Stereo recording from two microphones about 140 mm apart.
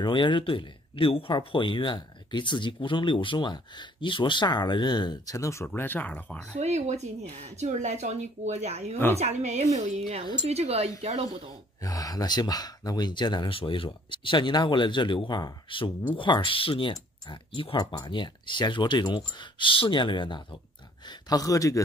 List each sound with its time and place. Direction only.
0.0 s speech: 35° left (ahead or behind); by 6.5 s 10° left (ahead or behind)
6.5 s a woman's voice: 55° right (ahead or behind)
11.8 s speech: 25° left (ahead or behind)